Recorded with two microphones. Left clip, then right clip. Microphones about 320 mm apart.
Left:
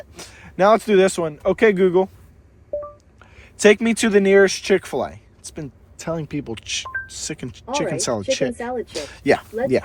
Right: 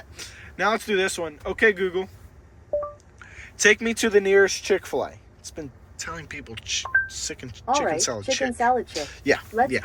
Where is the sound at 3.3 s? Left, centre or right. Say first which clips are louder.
Left 4 dB; centre.